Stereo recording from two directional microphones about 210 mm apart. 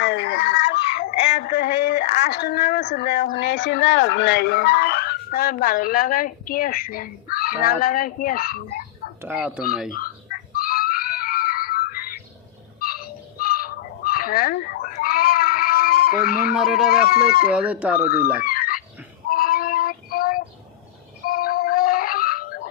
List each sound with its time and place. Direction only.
0.0 s a sound: 55° left (ahead or behind)
1.4 s speech: 50° left (ahead or behind)
9.2 s speech: 5° right (ahead or behind)
10.5 s screaming: 45° left (ahead or behind)
12.8 s dog: 45° left (ahead or behind)
16.5 s speech: centre (ahead or behind)
16.9 s speech: 45° left (ahead or behind)
17.5 s speech: 5° right (ahead or behind)
18.4 s chicken: 45° left (ahead or behind)
19.3 s child singing: 45° left (ahead or behind)
21.2 s a sound: 45° left (ahead or behind)